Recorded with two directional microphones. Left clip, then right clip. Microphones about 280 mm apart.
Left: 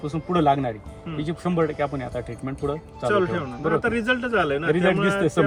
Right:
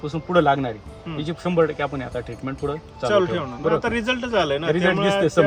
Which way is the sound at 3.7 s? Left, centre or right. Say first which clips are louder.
Left 1 dB; centre.